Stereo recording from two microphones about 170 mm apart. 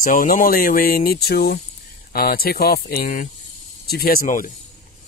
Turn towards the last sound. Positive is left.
turn(degrees=55)  # may be behind; listen again after turning